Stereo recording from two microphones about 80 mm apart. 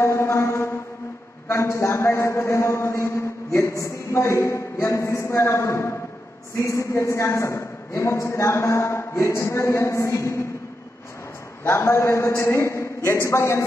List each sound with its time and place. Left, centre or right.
0.0 s a sound: left
1.5 s a man's voice: left
11.6 s a man's voice: left